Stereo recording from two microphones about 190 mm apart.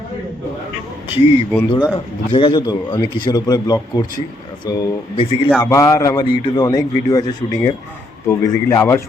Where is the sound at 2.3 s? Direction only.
25° left (ahead or behind).